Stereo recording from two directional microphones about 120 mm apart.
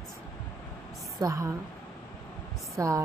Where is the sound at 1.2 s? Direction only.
25° right (ahead or behind).